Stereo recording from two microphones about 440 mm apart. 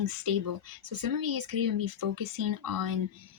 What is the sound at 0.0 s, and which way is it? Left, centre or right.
A woman's voice, right.